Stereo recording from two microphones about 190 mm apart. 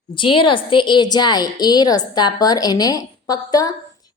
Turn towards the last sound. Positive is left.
turn(degrees=20)  # may be behind; listen again after turning